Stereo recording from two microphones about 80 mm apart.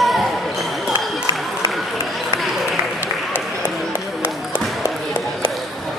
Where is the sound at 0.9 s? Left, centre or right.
Right.